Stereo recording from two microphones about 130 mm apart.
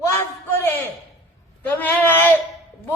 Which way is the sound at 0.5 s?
20° left (ahead or behind).